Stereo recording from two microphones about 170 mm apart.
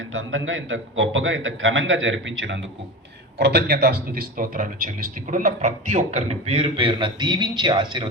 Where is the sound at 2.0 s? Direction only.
90° right.